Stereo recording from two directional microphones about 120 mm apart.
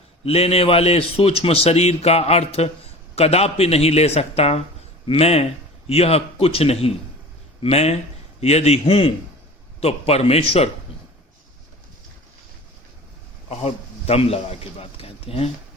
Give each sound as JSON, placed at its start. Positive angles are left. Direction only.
{"t": 0.3, "sound": "a man's voice", "side_deg": 55}
{"t": 13.5, "sound": "a man's voice", "side_deg": 60}